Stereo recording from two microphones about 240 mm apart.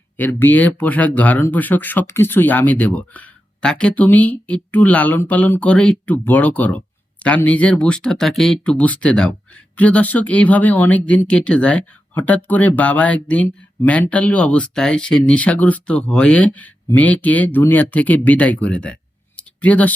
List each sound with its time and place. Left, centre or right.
0.2 s speech: centre